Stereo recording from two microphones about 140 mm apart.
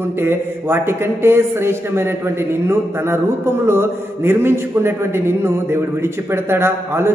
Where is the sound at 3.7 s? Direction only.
15° right (ahead or behind).